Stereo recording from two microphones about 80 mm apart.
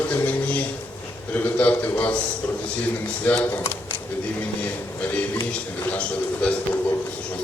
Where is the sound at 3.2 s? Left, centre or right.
Centre.